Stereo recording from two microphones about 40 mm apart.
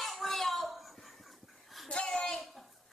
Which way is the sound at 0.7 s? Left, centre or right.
Centre.